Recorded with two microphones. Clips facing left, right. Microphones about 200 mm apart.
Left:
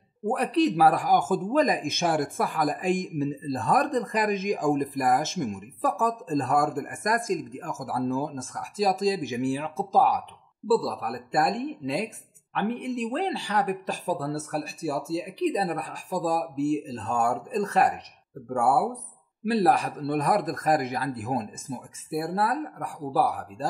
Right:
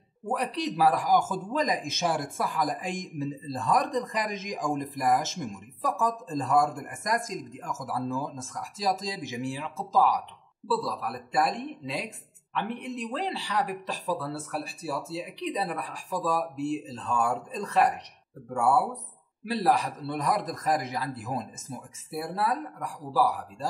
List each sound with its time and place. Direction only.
0.3 s speech: 55° left (ahead or behind)